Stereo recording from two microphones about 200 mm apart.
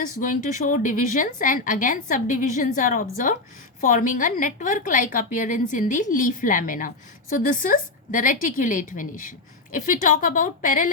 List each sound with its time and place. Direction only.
0.0 s a woman's voice: 40° left (ahead or behind)